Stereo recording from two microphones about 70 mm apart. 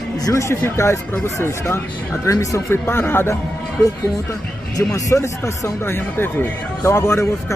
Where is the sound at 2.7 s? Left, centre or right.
Left.